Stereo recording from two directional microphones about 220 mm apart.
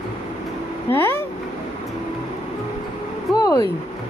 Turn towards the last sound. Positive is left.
turn(degrees=15)  # may be behind; listen again after turning